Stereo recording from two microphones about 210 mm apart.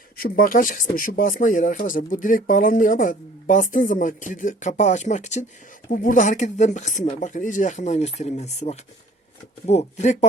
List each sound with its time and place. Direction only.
0.2 s speech: 45° left (ahead or behind)